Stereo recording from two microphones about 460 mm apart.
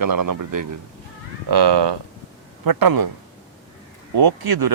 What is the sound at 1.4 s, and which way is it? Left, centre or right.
Speech, right.